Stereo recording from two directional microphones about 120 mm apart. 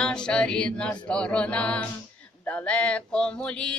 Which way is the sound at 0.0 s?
5° left (ahead or behind).